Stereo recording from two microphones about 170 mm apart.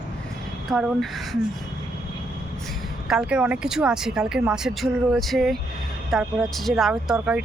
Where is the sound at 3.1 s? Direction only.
5° right (ahead or behind).